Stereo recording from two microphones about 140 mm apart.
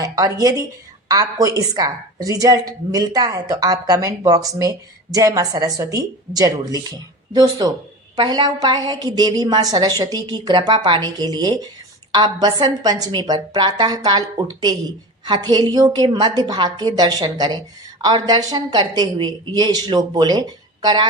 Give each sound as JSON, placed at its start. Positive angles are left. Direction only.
{"t": 0.0, "sound": "speech", "side_deg": -25}